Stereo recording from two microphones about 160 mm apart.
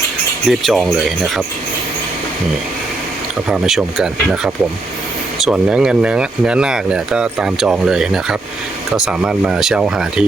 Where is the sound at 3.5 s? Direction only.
Centre (ahead or behind).